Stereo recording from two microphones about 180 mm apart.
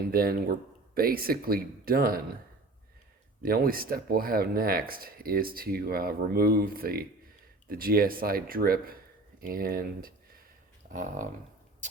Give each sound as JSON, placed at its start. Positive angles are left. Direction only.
{"t": 0.1, "sound": "speech", "side_deg": -55}
{"t": 3.4, "sound": "speech", "side_deg": -55}
{"t": 10.8, "sound": "a sound", "side_deg": -50}